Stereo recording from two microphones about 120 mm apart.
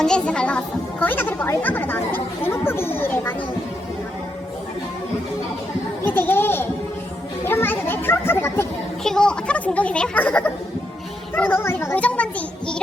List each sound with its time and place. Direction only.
0.0 s a child's voice: 5° left (ahead or behind)
6.0 s a child's voice: 15° left (ahead or behind)
9.0 s a child's voice: 5° left (ahead or behind)